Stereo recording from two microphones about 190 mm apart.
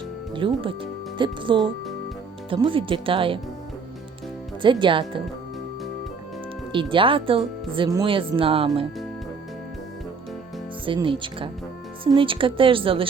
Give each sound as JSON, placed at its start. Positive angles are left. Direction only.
{"t": 0.3, "sound": "speech", "side_deg": -25}
{"t": 4.6, "sound": "speech", "side_deg": -25}
{"t": 6.7, "sound": "speech", "side_deg": -25}
{"t": 10.8, "sound": "speech", "side_deg": -25}